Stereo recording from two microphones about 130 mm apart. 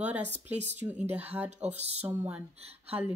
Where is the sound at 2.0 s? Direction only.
15° right (ahead or behind).